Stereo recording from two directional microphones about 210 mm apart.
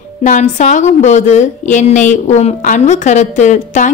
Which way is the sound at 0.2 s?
35° left (ahead or behind).